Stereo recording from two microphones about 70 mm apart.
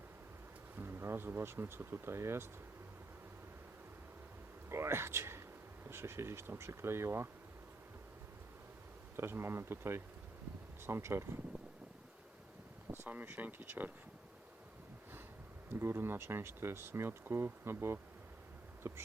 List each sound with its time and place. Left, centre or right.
0.8 s speech: right
4.7 s a sound: right
5.9 s speech: right
9.1 s speech: right
12.9 s a sound: right
13.2 s speech: right
15.7 s speech: right